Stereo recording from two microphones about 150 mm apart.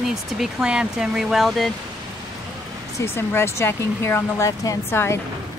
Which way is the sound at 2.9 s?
15° left (ahead or behind).